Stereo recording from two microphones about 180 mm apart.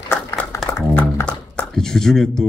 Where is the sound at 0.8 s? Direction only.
10° left (ahead or behind).